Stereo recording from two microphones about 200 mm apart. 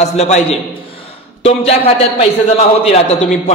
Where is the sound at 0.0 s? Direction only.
30° left (ahead or behind).